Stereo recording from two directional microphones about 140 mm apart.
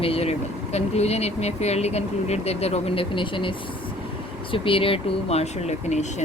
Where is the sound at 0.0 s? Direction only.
45° left (ahead or behind).